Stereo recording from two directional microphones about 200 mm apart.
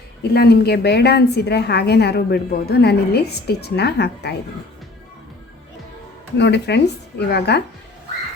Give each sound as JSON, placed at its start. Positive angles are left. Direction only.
{"t": 0.2, "sound": "a woman's voice", "side_deg": 50}
{"t": 6.3, "sound": "a woman's voice", "side_deg": 60}